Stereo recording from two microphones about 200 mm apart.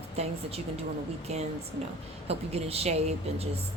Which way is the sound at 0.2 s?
30° right (ahead or behind).